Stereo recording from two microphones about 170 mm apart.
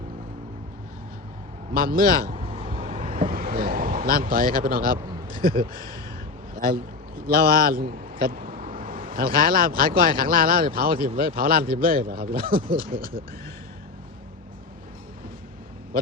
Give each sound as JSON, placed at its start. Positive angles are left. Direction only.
{"t": 1.7, "sound": "speech", "side_deg": -60}
{"t": 2.3, "sound": "vehicle", "side_deg": -35}
{"t": 2.7, "sound": "vehicle", "side_deg": -50}
{"t": 4.6, "sound": "a man's voice", "side_deg": -55}
{"t": 5.7, "sound": "speech", "side_deg": 20}
{"t": 6.5, "sound": "a man's voice", "side_deg": -55}